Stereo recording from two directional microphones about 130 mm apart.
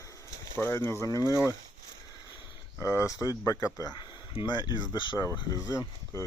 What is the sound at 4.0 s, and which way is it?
Speech, 35° left (ahead or behind).